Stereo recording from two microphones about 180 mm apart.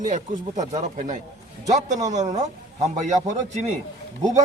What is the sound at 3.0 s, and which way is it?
Speech, 40° right (ahead or behind).